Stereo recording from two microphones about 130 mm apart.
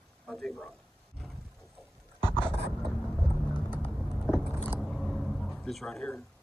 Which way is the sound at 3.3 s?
35° left (ahead or behind).